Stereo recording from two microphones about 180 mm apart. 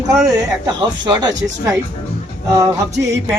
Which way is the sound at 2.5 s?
15° right (ahead or behind).